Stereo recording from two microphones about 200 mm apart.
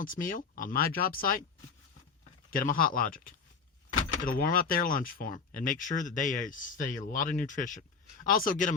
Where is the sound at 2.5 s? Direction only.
45° left (ahead or behind).